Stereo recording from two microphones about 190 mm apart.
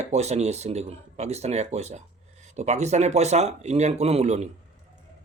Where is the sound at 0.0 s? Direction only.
35° right (ahead or behind).